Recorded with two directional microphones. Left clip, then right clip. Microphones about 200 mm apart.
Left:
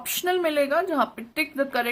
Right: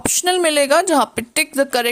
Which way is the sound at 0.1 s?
45° right (ahead or behind).